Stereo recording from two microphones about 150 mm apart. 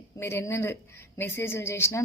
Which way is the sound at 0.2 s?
15° left (ahead or behind).